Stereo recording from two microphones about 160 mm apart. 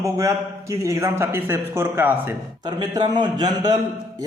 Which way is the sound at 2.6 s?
25° right (ahead or behind).